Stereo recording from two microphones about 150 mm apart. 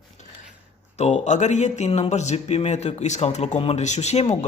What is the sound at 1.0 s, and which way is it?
Speech, 50° left (ahead or behind).